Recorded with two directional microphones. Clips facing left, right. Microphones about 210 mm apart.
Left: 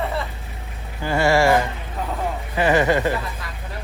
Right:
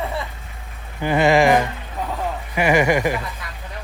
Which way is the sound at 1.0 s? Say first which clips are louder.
Right 2 dB; 20° right (ahead or behind).